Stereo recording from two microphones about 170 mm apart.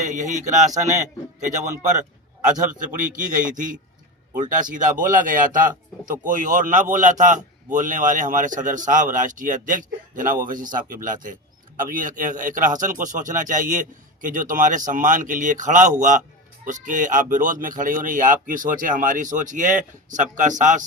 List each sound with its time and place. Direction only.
0.0 s a man's voice: 45° right (ahead or behind)